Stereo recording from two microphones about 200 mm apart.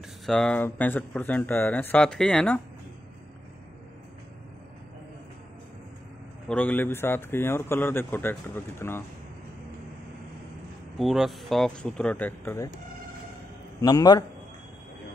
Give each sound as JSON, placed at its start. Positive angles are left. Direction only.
{"t": 0.3, "sound": "a man's voice", "side_deg": 5}
{"t": 6.4, "sound": "a man's voice", "side_deg": 5}
{"t": 11.0, "sound": "speech", "side_deg": 0}
{"t": 13.7, "sound": "a man's voice", "side_deg": 20}